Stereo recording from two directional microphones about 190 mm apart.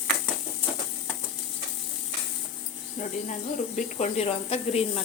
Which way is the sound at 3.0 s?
35° left (ahead or behind).